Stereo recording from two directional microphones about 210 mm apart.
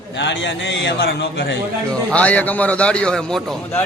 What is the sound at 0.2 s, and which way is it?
A man's voice, 60° left (ahead or behind).